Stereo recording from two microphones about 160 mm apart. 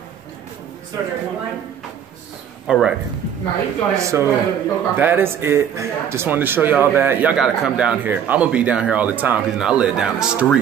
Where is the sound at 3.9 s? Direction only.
20° right (ahead or behind).